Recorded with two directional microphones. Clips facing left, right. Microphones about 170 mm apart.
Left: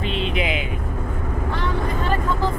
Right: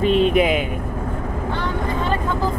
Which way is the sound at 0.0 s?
45° right (ahead or behind).